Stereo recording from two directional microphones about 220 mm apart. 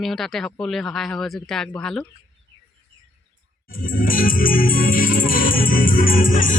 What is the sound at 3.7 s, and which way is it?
Music, 40° left (ahead or behind).